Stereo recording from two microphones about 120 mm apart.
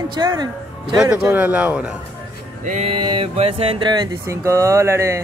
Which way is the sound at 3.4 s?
55° right (ahead or behind).